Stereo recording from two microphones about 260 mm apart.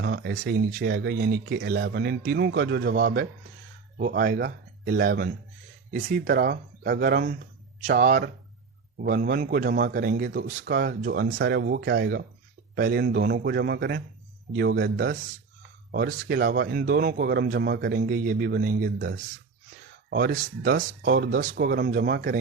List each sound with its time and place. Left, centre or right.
0.0 s speech: right